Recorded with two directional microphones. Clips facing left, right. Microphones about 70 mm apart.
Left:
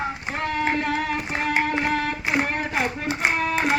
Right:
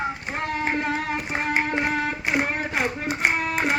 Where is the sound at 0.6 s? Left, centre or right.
Right.